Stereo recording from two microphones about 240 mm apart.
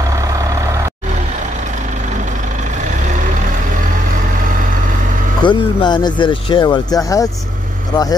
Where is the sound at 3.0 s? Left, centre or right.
Right.